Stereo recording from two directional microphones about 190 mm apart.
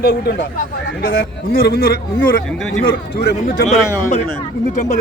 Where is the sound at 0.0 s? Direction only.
55° left (ahead or behind).